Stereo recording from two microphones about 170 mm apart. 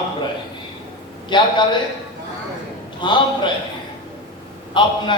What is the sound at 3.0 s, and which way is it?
Speech, 30° left (ahead or behind).